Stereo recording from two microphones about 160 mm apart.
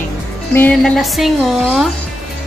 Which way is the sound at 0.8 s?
Centre (ahead or behind).